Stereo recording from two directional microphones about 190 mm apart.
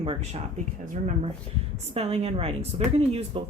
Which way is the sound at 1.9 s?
30° right (ahead or behind).